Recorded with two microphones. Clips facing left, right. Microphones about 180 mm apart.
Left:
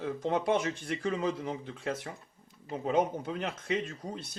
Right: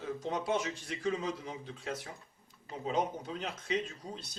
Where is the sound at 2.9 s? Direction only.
55° left (ahead or behind).